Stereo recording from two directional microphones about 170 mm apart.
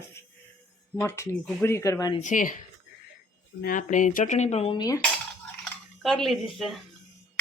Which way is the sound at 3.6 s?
55° left (ahead or behind).